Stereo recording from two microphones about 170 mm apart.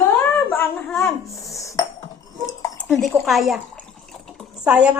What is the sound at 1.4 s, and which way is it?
Cutlery, 20° left (ahead or behind).